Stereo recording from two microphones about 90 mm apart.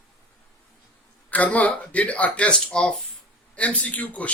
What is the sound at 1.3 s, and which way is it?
Speech, 15° left (ahead or behind).